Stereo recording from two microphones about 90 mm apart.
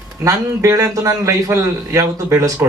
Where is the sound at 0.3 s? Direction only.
40° right (ahead or behind).